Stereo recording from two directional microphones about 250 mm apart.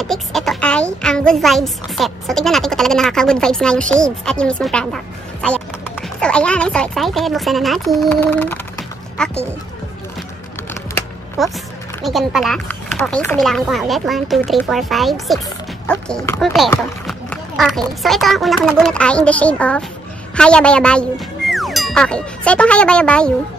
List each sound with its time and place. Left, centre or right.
0.0 s a woman's voice: centre
10.7 s a sound: centre
12.0 s a woman's voice: centre